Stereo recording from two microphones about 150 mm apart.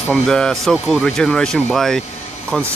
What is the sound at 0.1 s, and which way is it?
Speech, 5° left (ahead or behind).